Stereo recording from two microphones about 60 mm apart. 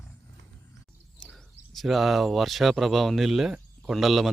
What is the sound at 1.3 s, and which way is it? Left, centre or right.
Speech, centre.